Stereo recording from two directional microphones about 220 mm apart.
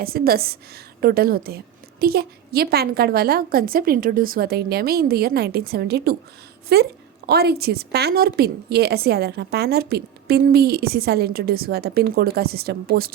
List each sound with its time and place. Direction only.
0.0 s a woman's voice: 45° right (ahead or behind)